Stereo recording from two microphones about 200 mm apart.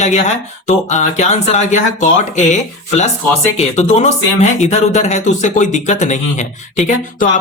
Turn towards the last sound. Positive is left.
turn(degrees=35)  # may be behind; listen again after turning